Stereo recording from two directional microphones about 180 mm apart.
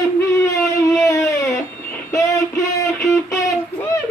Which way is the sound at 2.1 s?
15° left (ahead or behind).